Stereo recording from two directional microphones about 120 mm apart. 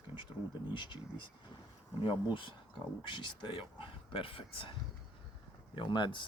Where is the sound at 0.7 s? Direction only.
40° left (ahead or behind).